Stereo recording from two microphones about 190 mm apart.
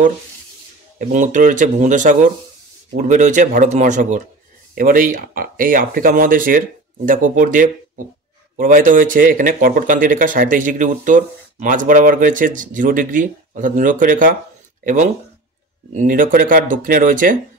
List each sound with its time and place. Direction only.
0.9 s speech: 40° right (ahead or behind)